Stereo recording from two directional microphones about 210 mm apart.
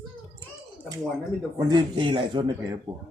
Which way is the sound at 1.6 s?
20° right (ahead or behind).